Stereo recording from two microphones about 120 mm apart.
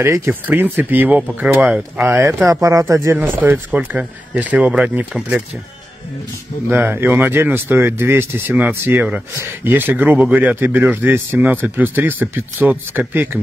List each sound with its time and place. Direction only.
0.0 s speech: 20° right (ahead or behind)
2.0 s speech: 20° right (ahead or behind)
3.3 s speech: 15° right (ahead or behind)
6.7 s speech: 20° right (ahead or behind)